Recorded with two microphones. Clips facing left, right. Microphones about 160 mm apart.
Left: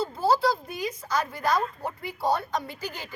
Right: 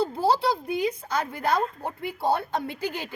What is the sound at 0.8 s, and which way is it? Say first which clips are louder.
A woman's voice: right 2 dB; 60° right (ahead or behind).